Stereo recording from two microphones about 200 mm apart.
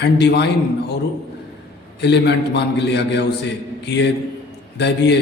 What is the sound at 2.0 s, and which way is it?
A man's voice, 60° left (ahead or behind).